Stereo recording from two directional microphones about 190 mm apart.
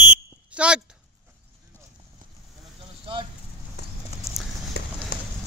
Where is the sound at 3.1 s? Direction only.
25° right (ahead or behind).